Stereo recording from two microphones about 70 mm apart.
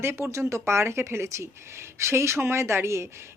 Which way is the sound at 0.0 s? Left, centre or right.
Right.